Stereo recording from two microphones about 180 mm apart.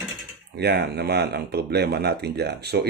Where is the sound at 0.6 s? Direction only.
65° right (ahead or behind).